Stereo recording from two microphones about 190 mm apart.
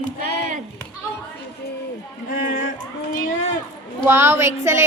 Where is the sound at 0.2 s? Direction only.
60° left (ahead or behind).